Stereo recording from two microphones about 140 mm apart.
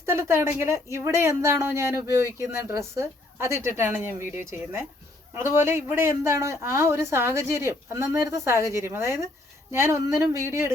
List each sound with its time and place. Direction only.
0.0 s speech: 20° right (ahead or behind)